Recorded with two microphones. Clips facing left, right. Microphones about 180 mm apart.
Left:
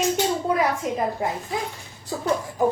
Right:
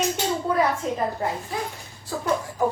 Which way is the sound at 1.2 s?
15° left (ahead or behind).